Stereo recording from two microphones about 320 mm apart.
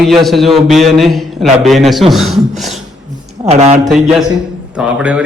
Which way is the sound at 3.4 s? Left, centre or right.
Centre.